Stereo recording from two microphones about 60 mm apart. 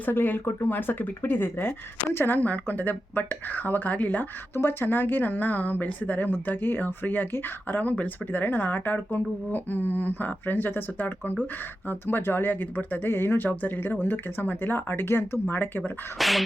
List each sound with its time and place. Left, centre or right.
0.0 s speech: left
4.5 s speech: left
16.1 s beatboxing: centre